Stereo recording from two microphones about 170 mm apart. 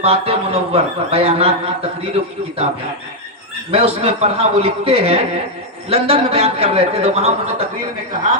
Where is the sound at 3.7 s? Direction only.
35° right (ahead or behind).